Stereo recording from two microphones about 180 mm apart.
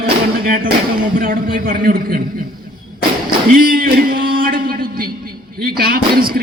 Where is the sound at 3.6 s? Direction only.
55° right (ahead or behind).